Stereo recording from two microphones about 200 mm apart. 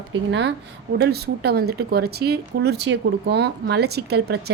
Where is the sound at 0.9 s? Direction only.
55° right (ahead or behind).